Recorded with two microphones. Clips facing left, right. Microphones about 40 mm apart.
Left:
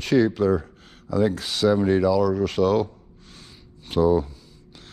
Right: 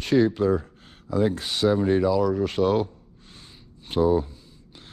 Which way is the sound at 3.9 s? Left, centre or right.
Left.